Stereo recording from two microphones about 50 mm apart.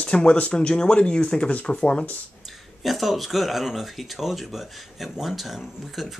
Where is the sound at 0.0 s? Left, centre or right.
Centre.